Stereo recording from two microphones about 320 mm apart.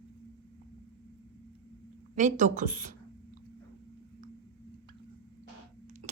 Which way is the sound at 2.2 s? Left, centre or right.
Right.